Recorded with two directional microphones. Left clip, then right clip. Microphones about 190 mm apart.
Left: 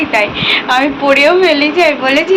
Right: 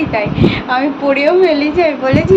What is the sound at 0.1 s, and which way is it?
A woman's voice, 5° right (ahead or behind).